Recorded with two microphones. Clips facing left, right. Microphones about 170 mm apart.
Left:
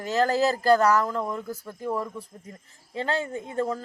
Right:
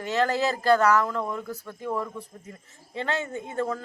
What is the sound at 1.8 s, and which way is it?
Speech, 10° left (ahead or behind).